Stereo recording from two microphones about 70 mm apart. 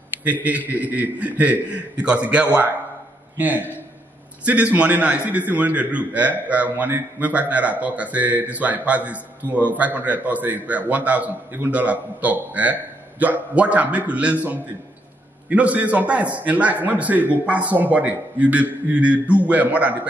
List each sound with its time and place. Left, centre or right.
0.2 s speech: right